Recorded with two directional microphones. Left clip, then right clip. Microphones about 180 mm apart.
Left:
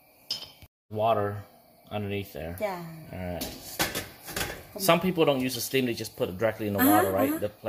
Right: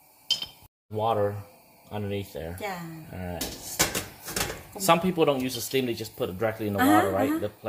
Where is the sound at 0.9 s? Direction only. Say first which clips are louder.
Even; centre (ahead or behind).